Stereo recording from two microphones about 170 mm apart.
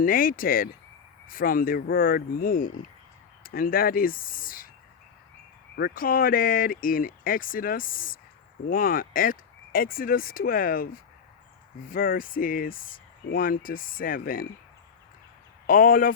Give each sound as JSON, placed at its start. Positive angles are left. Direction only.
{"t": 0.0, "sound": "speech", "side_deg": 55}
{"t": 5.7, "sound": "speech", "side_deg": 65}
{"t": 15.6, "sound": "speech", "side_deg": 55}